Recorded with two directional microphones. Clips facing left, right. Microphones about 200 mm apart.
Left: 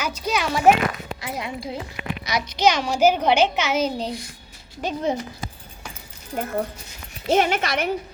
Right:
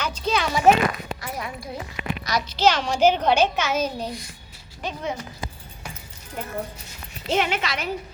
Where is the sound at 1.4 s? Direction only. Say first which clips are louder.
Left 3 dB; 25° left (ahead or behind).